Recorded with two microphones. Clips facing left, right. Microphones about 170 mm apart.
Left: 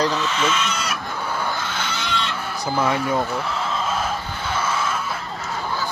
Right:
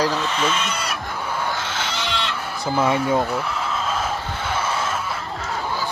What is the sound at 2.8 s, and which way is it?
Speech, 20° right (ahead or behind).